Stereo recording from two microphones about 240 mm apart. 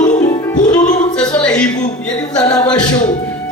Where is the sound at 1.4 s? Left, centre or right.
Centre.